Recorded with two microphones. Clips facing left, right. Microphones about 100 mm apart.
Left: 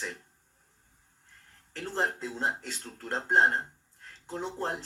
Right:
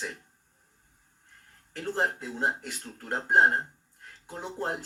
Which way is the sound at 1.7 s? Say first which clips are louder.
Right 2 dB; 15° right (ahead or behind).